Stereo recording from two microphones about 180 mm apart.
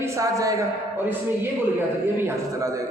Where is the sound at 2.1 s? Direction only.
15° right (ahead or behind).